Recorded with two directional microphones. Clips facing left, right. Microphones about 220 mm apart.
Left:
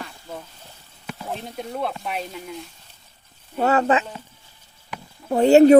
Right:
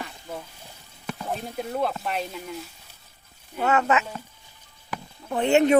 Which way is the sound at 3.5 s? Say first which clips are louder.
Left 3 dB; 35° left (ahead or behind).